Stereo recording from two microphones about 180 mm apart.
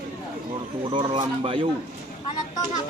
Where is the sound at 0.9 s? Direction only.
30° right (ahead or behind).